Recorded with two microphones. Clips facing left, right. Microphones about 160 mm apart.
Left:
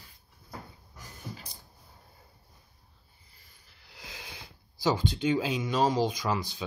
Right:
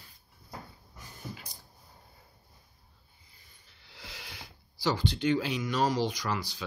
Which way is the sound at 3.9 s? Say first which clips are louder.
Left 1 dB; 20° left (ahead or behind).